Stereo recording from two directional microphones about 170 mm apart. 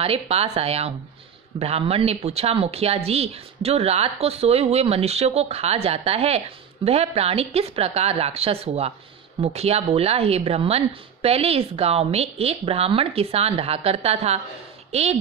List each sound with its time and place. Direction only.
0.0 s speech: 35° right (ahead or behind)